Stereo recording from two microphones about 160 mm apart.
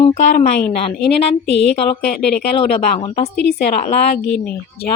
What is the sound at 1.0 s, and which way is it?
Speech, 90° left.